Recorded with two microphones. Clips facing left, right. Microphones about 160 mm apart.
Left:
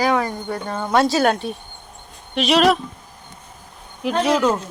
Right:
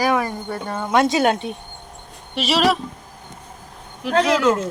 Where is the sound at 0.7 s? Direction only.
Centre (ahead or behind).